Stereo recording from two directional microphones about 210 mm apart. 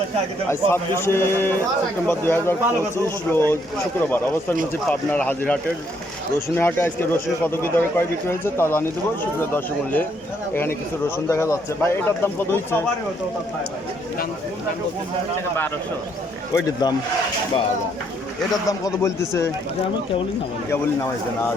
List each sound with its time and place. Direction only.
0.5 s speech: 10° left (ahead or behind)
4.9 s speech: 10° left (ahead or behind)
6.6 s speech: 10° left (ahead or behind)
16.8 s speech: 20° left (ahead or behind)
18.5 s speech: 15° left (ahead or behind)